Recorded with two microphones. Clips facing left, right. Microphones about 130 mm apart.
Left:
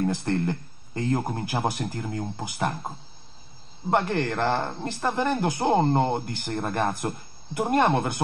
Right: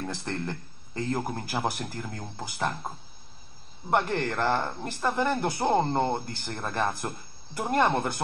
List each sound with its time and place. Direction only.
0.0 s speech: 20° left (ahead or behind)
3.9 s speech: 20° left (ahead or behind)